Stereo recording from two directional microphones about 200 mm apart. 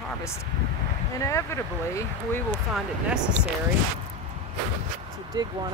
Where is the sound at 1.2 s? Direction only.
15° left (ahead or behind).